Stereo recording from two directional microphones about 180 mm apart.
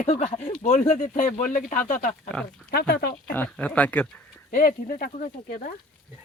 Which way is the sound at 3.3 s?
5° left (ahead or behind).